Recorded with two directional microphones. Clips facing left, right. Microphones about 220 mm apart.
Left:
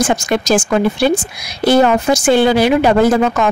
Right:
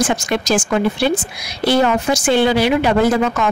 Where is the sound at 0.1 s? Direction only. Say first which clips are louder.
Left 3 dB; 45° left (ahead or behind).